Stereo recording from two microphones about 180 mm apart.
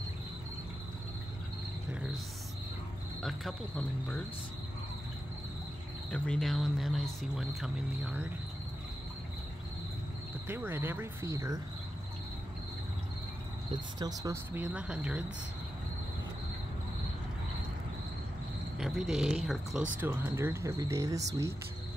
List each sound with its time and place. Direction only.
1.9 s cricket: 5° right (ahead or behind)
3.2 s speech: centre (ahead or behind)
6.0 s speech: 5° left (ahead or behind)
10.5 s speech: 10° right (ahead or behind)
13.9 s speech: 20° right (ahead or behind)
18.8 s speech: centre (ahead or behind); by 21.5 s 15° right (ahead or behind)